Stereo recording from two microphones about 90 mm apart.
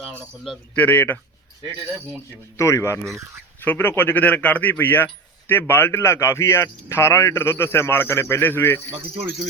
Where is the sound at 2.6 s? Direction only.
30° left (ahead or behind).